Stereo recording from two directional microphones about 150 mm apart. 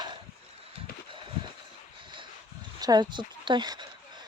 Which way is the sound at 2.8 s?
25° right (ahead or behind).